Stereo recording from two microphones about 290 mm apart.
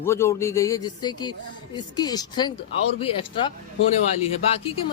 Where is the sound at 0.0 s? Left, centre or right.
Centre.